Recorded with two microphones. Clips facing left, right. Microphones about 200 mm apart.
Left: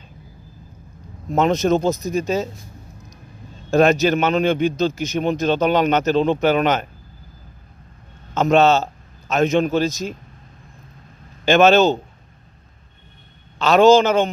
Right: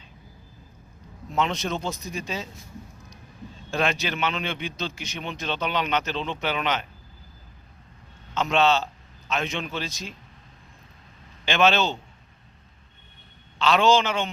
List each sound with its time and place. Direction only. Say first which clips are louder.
1.3 s a man's voice: left 10 dB; 45° left (ahead or behind)
3.7 s a man's voice: left 12 dB; 45° left (ahead or behind)
8.4 s a man's voice: left 7 dB; 45° left (ahead or behind)
11.4 s a man's voice: left 9 dB; 45° left (ahead or behind)
13.6 s a man's voice: left 8 dB; 45° left (ahead or behind)